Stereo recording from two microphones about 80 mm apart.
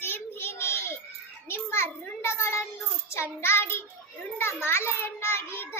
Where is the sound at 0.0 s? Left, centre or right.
Left.